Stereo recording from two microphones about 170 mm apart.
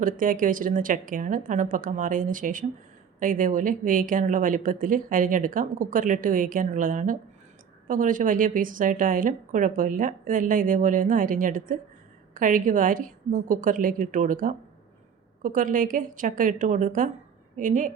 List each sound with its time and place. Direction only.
0.0 s speech: 55° right (ahead or behind)